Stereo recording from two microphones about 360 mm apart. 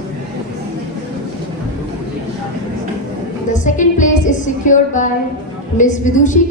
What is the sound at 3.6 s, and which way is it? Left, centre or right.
Music, left.